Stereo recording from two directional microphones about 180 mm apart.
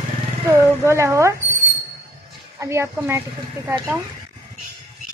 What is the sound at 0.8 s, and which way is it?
Speech, 15° right (ahead or behind).